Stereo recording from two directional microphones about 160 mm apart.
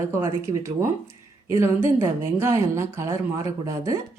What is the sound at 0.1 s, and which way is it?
A woman's voice, 15° right (ahead or behind).